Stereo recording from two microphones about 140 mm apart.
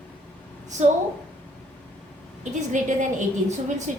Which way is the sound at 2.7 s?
60° right (ahead or behind).